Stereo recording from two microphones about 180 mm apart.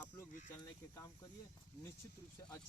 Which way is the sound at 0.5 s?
15° left (ahead or behind).